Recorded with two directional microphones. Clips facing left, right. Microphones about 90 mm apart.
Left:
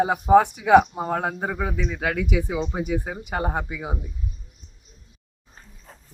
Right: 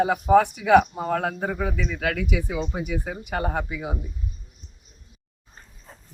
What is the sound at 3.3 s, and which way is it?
Speech, 25° left (ahead or behind).